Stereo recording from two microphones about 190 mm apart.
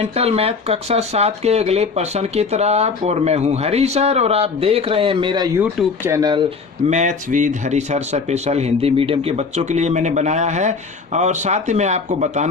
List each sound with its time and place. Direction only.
0.0 s a man's voice: 30° right (ahead or behind)
5.5 s speech: 10° right (ahead or behind)
6.9 s a man's voice: 40° right (ahead or behind)